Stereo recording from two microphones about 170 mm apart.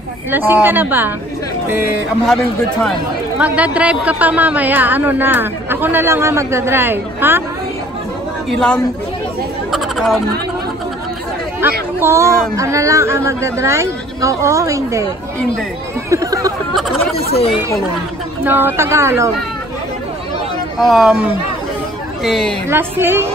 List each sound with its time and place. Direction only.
0.3 s a woman's voice: 10° right (ahead or behind)
3.3 s a woman's voice: 10° right (ahead or behind)
8.5 s speech: 5° left (ahead or behind)
9.7 s chatter: centre (ahead or behind)
11.6 s a woman's voice: 10° right (ahead or behind)
16.1 s speech: 20° right (ahead or behind)
17.3 s speech: 35° left (ahead or behind)
18.4 s a woman's voice: 10° right (ahead or behind)
20.8 s speech: centre (ahead or behind)
22.7 s a woman's voice: 15° right (ahead or behind)